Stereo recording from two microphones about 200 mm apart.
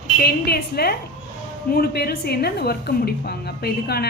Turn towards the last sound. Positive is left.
turn(degrees=50)  # may be behind; listen again after turning